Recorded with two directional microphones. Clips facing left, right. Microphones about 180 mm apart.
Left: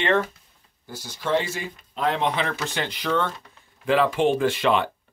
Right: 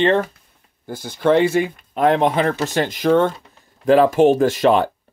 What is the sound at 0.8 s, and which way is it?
Speech, 55° right (ahead or behind).